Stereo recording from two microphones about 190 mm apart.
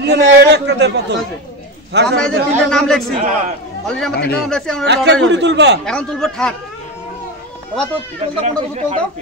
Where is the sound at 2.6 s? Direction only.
5° left (ahead or behind).